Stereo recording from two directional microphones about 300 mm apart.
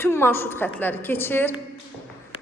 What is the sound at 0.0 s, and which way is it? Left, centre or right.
A woman's voice, centre.